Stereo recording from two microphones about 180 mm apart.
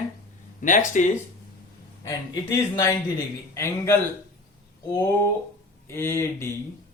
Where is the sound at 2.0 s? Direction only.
20° left (ahead or behind).